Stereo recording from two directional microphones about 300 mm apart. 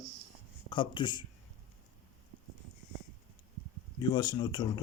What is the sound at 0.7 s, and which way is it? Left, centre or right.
Speech, centre.